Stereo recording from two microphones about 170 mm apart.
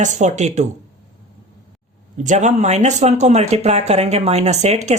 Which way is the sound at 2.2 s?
45° right (ahead or behind).